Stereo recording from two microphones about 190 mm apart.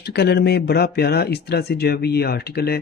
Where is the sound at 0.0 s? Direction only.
60° left (ahead or behind).